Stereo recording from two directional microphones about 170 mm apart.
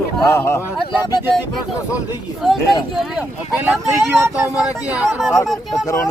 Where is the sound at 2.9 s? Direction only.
5° right (ahead or behind).